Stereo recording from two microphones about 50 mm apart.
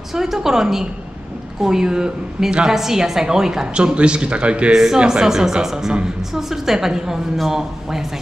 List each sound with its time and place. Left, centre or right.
0.1 s a woman's voice: centre
3.7 s a man's voice: right